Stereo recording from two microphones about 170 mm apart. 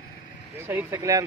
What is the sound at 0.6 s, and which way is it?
Speech, 15° right (ahead or behind).